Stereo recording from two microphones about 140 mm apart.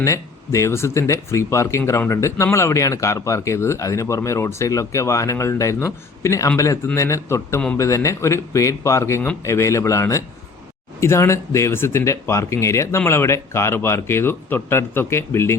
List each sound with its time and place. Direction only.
0.0 s a man's voice: 20° left (ahead or behind)